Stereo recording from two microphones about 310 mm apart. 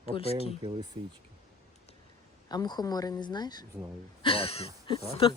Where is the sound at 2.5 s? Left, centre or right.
Centre.